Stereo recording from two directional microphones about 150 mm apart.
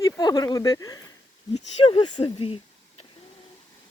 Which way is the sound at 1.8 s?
35° left (ahead or behind).